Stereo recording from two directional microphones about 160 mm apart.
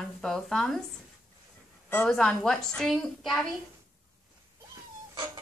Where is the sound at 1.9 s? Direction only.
10° left (ahead or behind).